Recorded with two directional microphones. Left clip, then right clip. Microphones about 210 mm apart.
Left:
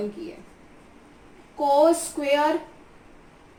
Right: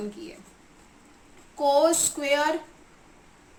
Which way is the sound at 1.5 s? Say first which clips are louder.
Left 2 dB; 30° right (ahead or behind).